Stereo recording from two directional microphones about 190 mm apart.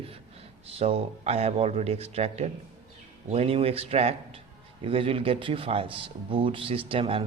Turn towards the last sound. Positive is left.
turn(degrees=-30)  # may be behind; listen again after turning